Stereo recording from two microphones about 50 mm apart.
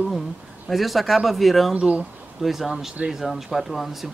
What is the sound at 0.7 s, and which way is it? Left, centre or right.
Speech, centre.